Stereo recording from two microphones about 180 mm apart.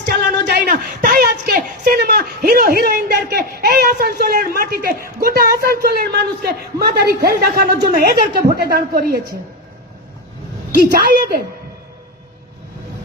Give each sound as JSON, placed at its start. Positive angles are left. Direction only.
{"t": 0.2, "sound": "a sound", "side_deg": -55}
{"t": 5.2, "sound": "a man's voice", "side_deg": -55}
{"t": 10.8, "sound": "a woman's voice", "side_deg": -55}